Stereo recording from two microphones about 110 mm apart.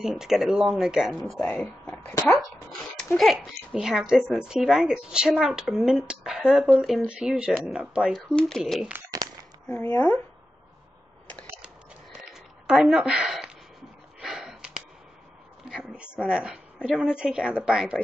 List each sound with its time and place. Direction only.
0.0 s speech: 5° right (ahead or behind)
3.2 s speech: centre (ahead or behind)
8.3 s speech: 5° left (ahead or behind)
9.1 s a sound: 35° right (ahead or behind)
9.7 s speech: 10° left (ahead or behind)
11.6 s a sound: 10° right (ahead or behind)
14.2 s sniff: 5° right (ahead or behind)
15.7 s a woman's voice: 5° right (ahead or behind)